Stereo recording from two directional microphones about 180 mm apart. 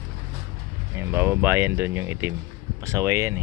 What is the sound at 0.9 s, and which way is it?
Speech, 10° right (ahead or behind).